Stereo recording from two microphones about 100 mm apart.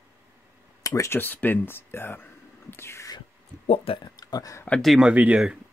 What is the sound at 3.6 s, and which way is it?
Speech, 70° left (ahead or behind).